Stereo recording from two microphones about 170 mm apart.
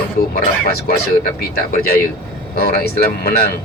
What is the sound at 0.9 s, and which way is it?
Speech, 65° left (ahead or behind).